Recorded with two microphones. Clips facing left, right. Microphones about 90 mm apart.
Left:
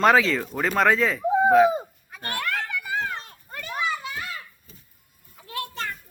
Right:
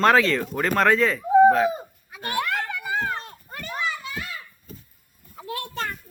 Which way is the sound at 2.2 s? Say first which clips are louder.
Right 3 dB; 15° right (ahead or behind).